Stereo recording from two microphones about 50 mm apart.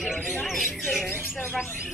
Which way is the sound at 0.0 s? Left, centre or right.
Centre.